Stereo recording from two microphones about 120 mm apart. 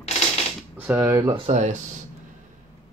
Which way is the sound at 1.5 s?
90° right.